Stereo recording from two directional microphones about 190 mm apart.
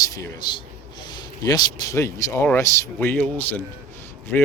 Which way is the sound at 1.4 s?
20° left (ahead or behind).